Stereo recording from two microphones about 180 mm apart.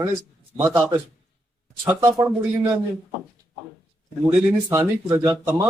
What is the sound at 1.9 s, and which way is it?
Speech, 20° right (ahead or behind).